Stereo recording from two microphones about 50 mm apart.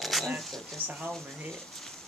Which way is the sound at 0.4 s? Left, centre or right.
Centre.